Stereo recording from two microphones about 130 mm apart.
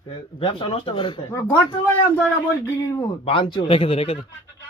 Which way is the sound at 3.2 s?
40° left (ahead or behind).